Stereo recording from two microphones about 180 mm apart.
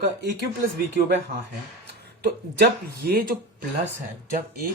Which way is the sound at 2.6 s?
55° right (ahead or behind).